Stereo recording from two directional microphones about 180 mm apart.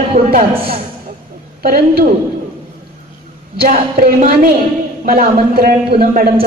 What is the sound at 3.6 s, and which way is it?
Speech, 55° right (ahead or behind).